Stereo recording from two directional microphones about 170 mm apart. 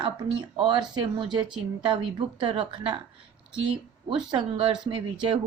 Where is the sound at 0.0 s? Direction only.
30° right (ahead or behind).